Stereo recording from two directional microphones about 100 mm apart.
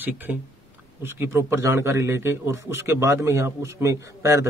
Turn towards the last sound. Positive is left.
turn(degrees=-30)  # may be behind; listen again after turning